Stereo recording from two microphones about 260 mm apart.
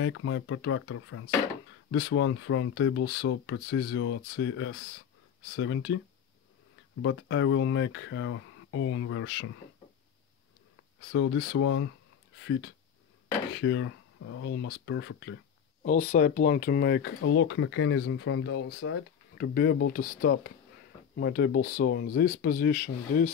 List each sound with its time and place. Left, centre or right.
0.0 s speech: left
7.0 s speech: left
11.1 s speech: left
15.8 s speech: left